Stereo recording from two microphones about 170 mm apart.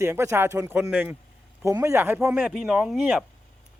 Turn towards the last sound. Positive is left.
turn(degrees=0)  # may be behind; listen again after turning